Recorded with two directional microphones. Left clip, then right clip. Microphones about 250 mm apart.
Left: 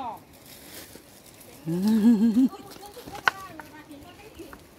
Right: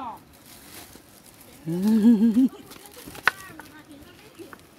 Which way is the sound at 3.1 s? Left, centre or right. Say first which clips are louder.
Right 1 dB; right.